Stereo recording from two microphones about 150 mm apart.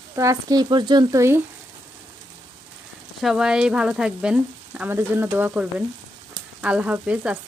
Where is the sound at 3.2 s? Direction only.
5° right (ahead or behind).